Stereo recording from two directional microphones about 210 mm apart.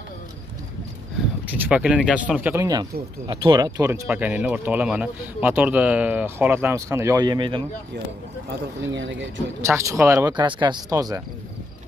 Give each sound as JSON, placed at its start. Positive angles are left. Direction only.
{"t": 1.5, "sound": "speech", "side_deg": -5}
{"t": 8.5, "sound": "speech", "side_deg": -60}
{"t": 9.6, "sound": "speech", "side_deg": -15}